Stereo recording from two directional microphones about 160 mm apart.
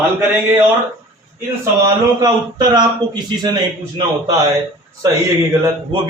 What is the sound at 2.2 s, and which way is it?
A man's voice, 25° right (ahead or behind).